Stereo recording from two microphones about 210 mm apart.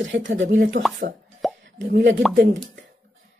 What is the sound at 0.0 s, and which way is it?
Speech, 60° right (ahead or behind).